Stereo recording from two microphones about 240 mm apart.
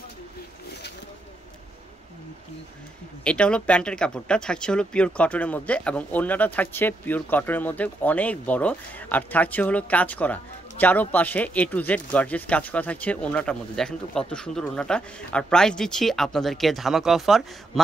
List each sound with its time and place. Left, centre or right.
3.3 s speech: centre